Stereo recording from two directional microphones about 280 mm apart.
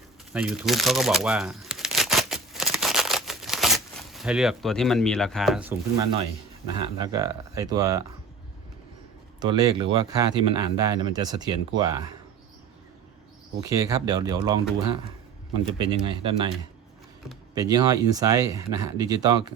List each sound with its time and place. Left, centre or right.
0.3 s crumpling: centre
6.7 s speech: centre
9.4 s speech: centre
13.6 s speech: centre
15.8 s speech: centre
17.5 s speech: centre